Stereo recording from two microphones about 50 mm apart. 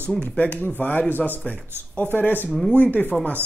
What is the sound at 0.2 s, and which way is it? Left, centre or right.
Speech, left.